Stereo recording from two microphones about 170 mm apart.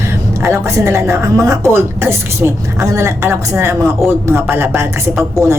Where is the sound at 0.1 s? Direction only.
15° right (ahead or behind).